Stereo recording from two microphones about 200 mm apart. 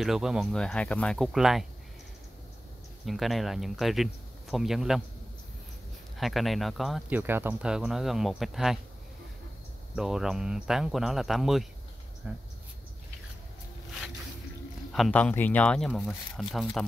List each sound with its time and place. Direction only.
0.0 s speech: centre (ahead or behind)
3.1 s speech: centre (ahead or behind)
6.1 s speech: centre (ahead or behind)
9.9 s speech: centre (ahead or behind)
14.9 s speech: 5° left (ahead or behind)